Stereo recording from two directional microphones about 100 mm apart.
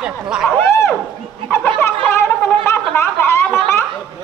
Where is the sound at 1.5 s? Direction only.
25° left (ahead or behind).